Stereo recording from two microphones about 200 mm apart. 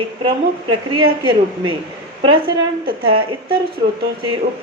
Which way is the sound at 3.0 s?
25° right (ahead or behind).